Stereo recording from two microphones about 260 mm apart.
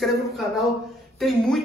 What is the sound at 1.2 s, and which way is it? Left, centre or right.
Speech, centre.